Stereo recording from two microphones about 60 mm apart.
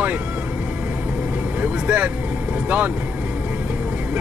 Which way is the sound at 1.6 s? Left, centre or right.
Right.